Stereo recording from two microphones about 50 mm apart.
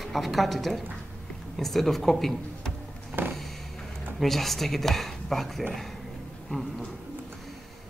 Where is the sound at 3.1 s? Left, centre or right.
Right.